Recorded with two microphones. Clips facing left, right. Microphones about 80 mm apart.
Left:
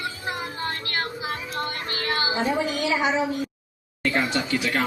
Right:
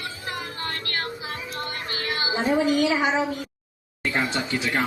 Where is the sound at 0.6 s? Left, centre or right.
Left.